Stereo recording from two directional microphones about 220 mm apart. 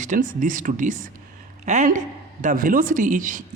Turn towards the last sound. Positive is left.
turn(degrees=-35)  # may be behind; listen again after turning